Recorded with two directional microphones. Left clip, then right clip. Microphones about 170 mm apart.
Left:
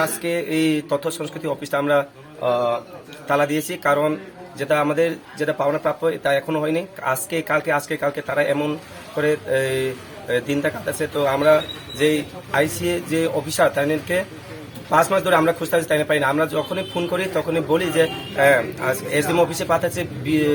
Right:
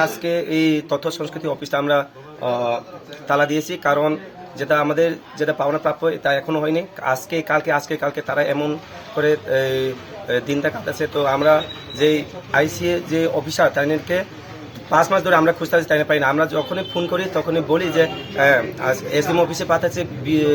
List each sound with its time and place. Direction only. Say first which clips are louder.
0.0 s speech: right 2 dB; centre (ahead or behind)